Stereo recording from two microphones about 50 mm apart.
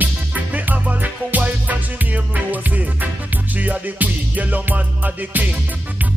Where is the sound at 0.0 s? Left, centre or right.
Right.